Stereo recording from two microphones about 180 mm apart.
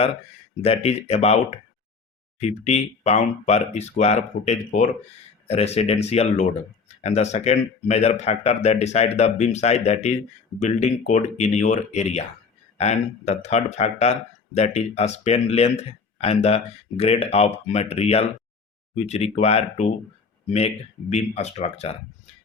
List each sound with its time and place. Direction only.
0.6 s speech: 35° left (ahead or behind)